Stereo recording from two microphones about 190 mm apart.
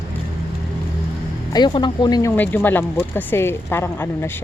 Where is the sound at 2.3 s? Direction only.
10° left (ahead or behind).